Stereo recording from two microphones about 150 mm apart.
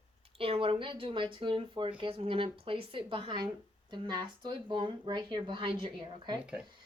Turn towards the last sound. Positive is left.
turn(degrees=-35)  # may be behind; listen again after turning